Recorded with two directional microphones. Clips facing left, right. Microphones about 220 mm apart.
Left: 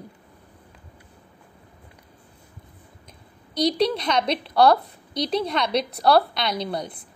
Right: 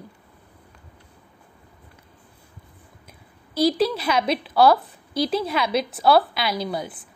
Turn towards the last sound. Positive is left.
turn(degrees=-5)  # may be behind; listen again after turning